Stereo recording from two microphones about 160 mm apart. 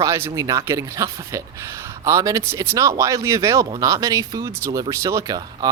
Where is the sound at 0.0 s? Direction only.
20° right (ahead or behind).